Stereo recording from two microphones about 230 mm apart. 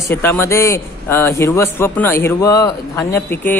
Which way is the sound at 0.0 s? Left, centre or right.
Centre.